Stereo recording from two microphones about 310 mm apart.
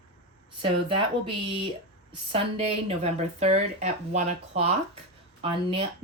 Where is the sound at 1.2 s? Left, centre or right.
Centre.